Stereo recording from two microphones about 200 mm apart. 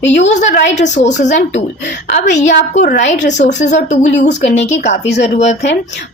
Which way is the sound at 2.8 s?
50° left (ahead or behind).